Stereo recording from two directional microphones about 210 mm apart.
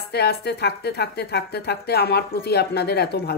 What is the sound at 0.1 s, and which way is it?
Speech, 50° left (ahead or behind).